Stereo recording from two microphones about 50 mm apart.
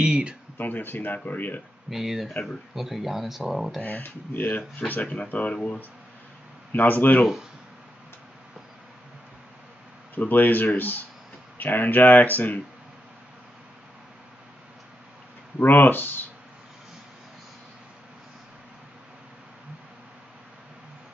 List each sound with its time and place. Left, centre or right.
0.0 s a sound: centre
0.6 s speech: left
1.9 s speech: centre
3.8 s speech: left
10.1 s speech: left
15.6 s speech: left